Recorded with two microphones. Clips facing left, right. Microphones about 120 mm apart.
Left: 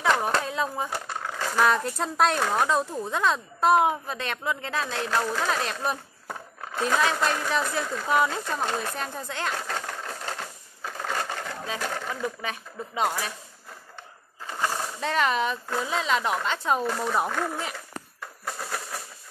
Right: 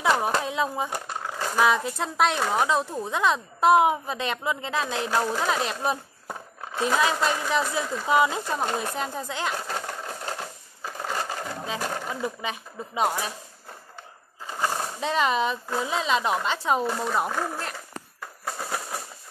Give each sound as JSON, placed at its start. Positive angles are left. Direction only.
{"t": 0.0, "sound": "a sound", "side_deg": -10}
{"t": 0.9, "sound": "speech", "side_deg": -15}
{"t": 6.9, "sound": "speech", "side_deg": -5}
{"t": 10.8, "sound": "a sound", "side_deg": -10}
{"t": 13.0, "sound": "speech", "side_deg": -20}
{"t": 14.7, "sound": "speech", "side_deg": -15}
{"t": 16.5, "sound": "speech", "side_deg": -5}